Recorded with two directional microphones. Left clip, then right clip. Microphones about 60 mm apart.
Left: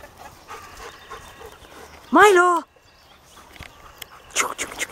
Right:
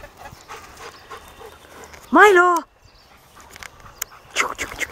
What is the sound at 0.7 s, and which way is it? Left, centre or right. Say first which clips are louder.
Pant: right 1 dB; centre.